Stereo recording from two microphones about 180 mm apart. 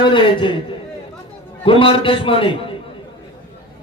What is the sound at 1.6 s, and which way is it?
A man's voice, 30° left (ahead or behind).